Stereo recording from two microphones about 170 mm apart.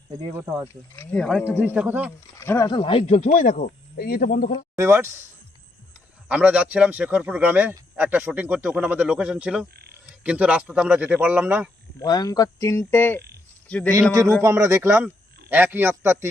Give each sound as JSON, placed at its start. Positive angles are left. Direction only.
{"t": 0.9, "sound": "speech", "side_deg": 5}
{"t": 1.5, "sound": "speech", "side_deg": -10}
{"t": 2.4, "sound": "speech", "side_deg": 15}
{"t": 2.7, "sound": "speech", "side_deg": 30}
{"t": 3.2, "sound": "speech", "side_deg": 50}
{"t": 4.8, "sound": "speech", "side_deg": -15}
{"t": 6.2, "sound": "speech", "side_deg": -5}
{"t": 11.9, "sound": "a man's voice", "side_deg": 20}
{"t": 14.4, "sound": "speech", "side_deg": -15}